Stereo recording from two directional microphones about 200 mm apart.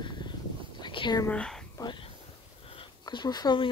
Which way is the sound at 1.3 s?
5° left (ahead or behind).